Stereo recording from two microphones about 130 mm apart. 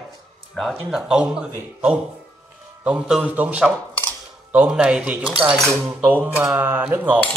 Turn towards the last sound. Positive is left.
turn(degrees=-15)  # may be behind; listen again after turning